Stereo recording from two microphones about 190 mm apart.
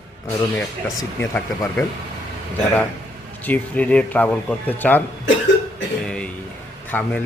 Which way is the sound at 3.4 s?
10° left (ahead or behind).